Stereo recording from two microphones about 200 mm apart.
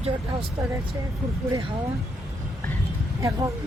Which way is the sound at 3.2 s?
15° right (ahead or behind).